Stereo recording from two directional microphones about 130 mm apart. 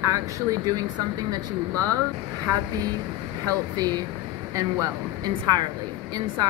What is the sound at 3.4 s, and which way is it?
Speech, 30° right (ahead or behind).